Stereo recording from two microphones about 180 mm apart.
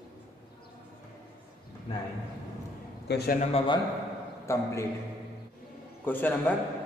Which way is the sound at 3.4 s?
35° left (ahead or behind).